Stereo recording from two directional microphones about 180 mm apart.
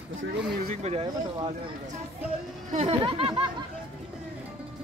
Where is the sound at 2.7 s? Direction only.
35° right (ahead or behind).